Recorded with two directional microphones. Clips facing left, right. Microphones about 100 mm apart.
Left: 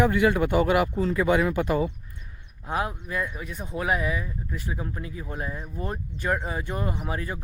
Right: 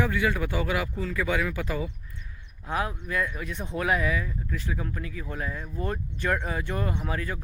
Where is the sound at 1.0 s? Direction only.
20° left (ahead or behind).